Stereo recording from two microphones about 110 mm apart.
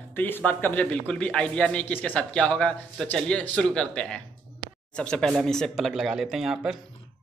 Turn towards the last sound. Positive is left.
turn(degrees=-5)  # may be behind; listen again after turning